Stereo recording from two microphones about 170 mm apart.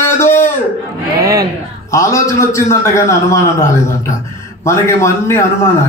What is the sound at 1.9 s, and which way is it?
A man's voice, 20° left (ahead or behind).